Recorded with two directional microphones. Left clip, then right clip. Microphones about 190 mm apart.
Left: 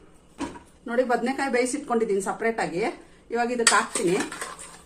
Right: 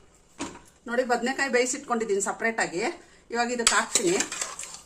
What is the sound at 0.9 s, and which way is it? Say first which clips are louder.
A woman's voice: left 2 dB; 15° right (ahead or behind).